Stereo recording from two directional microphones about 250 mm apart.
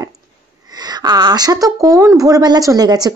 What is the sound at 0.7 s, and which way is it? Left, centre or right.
Speech, centre.